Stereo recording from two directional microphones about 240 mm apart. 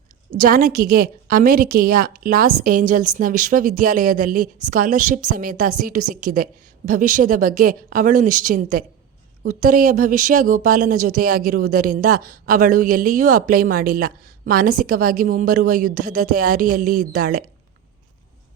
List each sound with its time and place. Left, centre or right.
0.3 s a woman's voice: right